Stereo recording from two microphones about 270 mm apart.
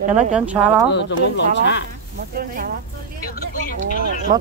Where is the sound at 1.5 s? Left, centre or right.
Left.